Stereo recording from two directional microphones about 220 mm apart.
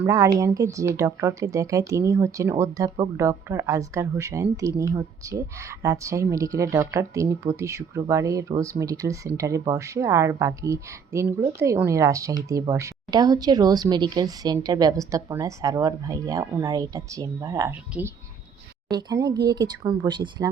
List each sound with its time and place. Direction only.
0.0 s speech: 15° right (ahead or behind)